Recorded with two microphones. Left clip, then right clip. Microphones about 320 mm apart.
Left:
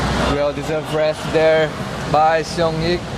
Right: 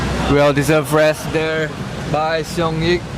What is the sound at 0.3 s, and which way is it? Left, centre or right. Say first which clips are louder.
Speech: right 6 dB; right.